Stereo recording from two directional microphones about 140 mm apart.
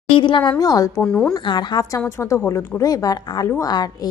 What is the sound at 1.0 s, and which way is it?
Speech, 5° left (ahead or behind).